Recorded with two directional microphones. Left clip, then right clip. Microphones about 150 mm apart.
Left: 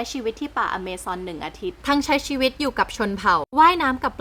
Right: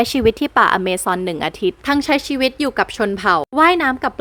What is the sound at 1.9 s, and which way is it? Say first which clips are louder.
A woman's voice: right 2 dB; 25° right (ahead or behind).